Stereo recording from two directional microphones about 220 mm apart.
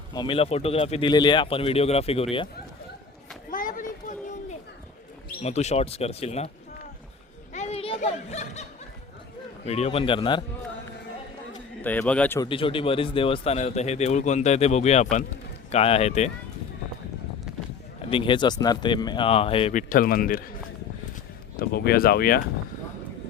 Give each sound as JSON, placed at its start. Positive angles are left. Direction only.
{"t": 0.1, "sound": "speech", "side_deg": 20}
{"t": 3.5, "sound": "a sound", "side_deg": 40}
{"t": 5.4, "sound": "speech", "side_deg": 30}
{"t": 7.5, "sound": "a sound", "side_deg": 30}
{"t": 9.6, "sound": "speech", "side_deg": 30}
{"t": 11.8, "sound": "a man's voice", "side_deg": 10}
{"t": 12.5, "sound": "speech", "side_deg": 25}
{"t": 18.1, "sound": "speech", "side_deg": 20}
{"t": 19.9, "sound": "speech", "side_deg": 40}
{"t": 21.5, "sound": "speech", "side_deg": 45}